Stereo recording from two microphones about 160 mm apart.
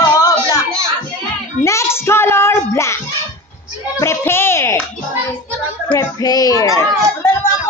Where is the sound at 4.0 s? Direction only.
15° left (ahead or behind).